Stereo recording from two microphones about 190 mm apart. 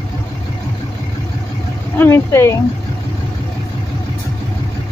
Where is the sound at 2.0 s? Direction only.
15° left (ahead or behind).